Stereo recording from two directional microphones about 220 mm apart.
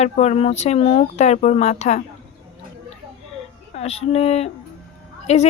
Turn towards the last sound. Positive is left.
turn(degrees=30)  # may be behind; listen again after turning